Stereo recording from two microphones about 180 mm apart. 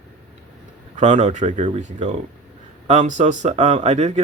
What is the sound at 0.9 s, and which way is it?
Speech, 40° right (ahead or behind).